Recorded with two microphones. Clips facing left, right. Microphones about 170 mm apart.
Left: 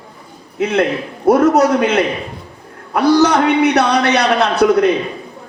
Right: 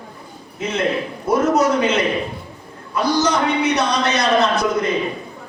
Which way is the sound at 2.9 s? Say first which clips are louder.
Left 7 dB; 65° left (ahead or behind).